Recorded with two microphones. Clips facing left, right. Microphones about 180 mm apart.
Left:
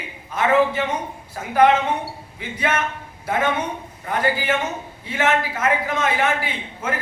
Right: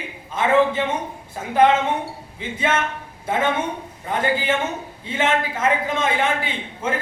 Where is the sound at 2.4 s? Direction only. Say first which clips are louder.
Right 1 dB; 25° right (ahead or behind).